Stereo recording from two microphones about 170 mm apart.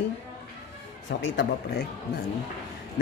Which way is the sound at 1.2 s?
90° left.